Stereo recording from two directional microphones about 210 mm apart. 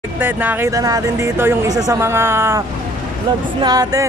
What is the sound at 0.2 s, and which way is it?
Speech, 10° right (ahead or behind).